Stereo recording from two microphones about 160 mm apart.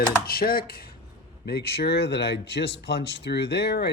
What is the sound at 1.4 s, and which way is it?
Speech, 85° left.